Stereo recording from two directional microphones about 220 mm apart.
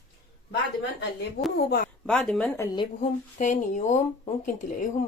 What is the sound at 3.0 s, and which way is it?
Speech, 35° left (ahead or behind).